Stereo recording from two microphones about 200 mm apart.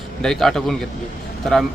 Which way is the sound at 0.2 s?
Centre (ahead or behind).